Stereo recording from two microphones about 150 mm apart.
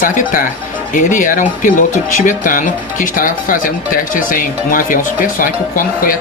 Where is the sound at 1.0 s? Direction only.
60° left (ahead or behind).